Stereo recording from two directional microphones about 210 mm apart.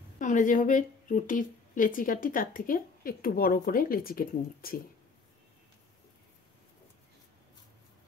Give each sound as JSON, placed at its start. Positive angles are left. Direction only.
{"t": 0.2, "sound": "a woman's voice", "side_deg": 35}